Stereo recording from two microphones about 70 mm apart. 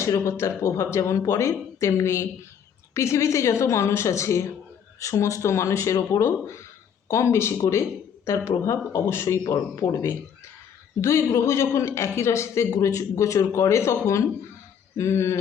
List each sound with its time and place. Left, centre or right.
0.0 s a man's voice: left